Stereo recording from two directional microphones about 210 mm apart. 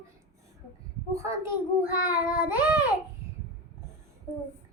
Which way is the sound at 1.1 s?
15° right (ahead or behind).